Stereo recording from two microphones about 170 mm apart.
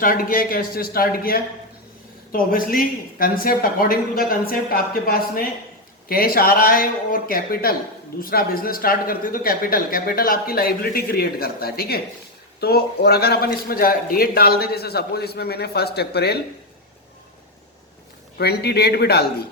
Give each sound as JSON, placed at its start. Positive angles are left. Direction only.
{"t": 0.0, "sound": "a man's voice", "side_deg": 55}
{"t": 18.3, "sound": "a man's voice", "side_deg": 70}